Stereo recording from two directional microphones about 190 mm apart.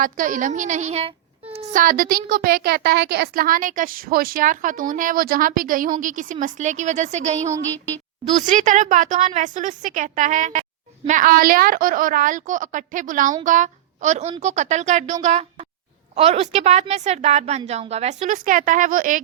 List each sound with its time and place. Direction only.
0.0 s a woman's voice: 45° right (ahead or behind)